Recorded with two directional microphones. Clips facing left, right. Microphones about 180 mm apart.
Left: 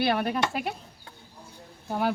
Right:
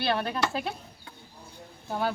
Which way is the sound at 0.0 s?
15° left (ahead or behind).